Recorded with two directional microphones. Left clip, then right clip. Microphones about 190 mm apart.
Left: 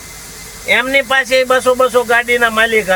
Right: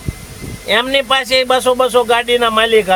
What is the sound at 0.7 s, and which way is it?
Speech, 15° right (ahead or behind).